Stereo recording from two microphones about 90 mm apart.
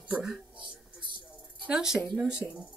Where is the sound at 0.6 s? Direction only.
65° right (ahead or behind).